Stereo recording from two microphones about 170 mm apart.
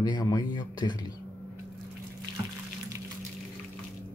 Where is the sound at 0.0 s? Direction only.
25° left (ahead or behind).